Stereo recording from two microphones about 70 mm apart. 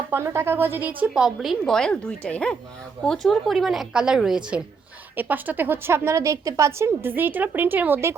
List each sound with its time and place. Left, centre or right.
0.1 s a woman's voice: right
1.1 s a woman's voice: centre
1.6 s a woman's voice: centre
5.1 s a woman's voice: right
7.2 s a woman's voice: right